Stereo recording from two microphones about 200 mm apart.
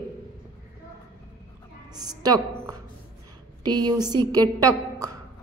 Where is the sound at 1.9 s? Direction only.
20° right (ahead or behind).